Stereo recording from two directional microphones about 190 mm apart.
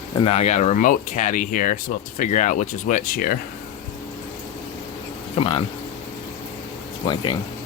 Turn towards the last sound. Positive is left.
turn(degrees=25)  # may be behind; listen again after turning